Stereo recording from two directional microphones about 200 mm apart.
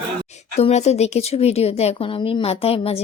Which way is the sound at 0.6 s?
30° left (ahead or behind).